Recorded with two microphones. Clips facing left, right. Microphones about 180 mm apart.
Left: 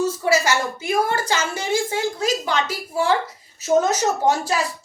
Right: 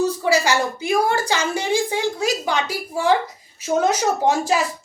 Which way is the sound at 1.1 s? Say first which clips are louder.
Right 2 dB; 15° right (ahead or behind).